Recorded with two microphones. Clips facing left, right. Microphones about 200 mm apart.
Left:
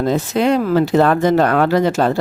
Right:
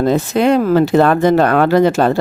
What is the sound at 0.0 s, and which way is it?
Speech, 60° right (ahead or behind).